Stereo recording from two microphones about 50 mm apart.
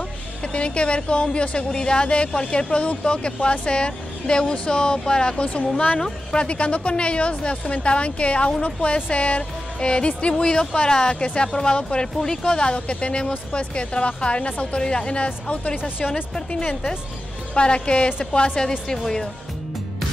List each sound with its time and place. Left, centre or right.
0.4 s a woman's voice: left
16.3 s a woman's voice: centre